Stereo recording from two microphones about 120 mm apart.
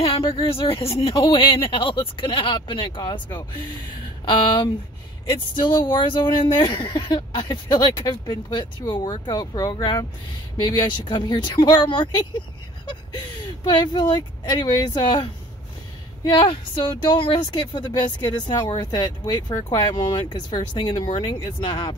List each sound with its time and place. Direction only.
0.0 s speech: 50° left (ahead or behind)
13.7 s speech: 40° left (ahead or behind)
16.3 s speech: 40° left (ahead or behind)